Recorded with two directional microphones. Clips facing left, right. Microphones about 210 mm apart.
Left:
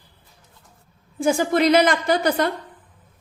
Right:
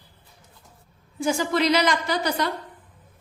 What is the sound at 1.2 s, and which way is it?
A woman's voice, 50° left (ahead or behind).